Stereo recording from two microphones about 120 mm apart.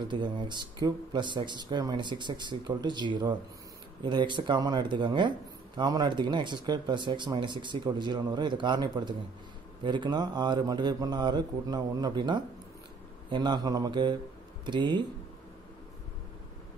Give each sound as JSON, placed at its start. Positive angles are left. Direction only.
{"t": 0.1, "sound": "speech", "side_deg": -40}